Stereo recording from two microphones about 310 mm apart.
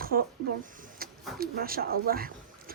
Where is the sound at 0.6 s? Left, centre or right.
Right.